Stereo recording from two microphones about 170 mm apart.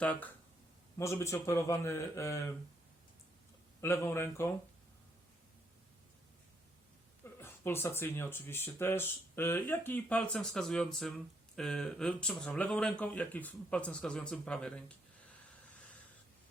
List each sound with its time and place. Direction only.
0.0 s speech: 10° left (ahead or behind)
3.8 s speech: 15° left (ahead or behind)
7.3 s speech: 15° left (ahead or behind)